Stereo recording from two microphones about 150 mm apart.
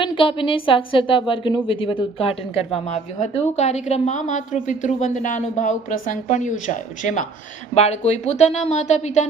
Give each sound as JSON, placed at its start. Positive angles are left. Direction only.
{"t": 0.0, "sound": "a woman's voice", "side_deg": 35}
{"t": 7.7, "sound": "a woman's voice", "side_deg": 45}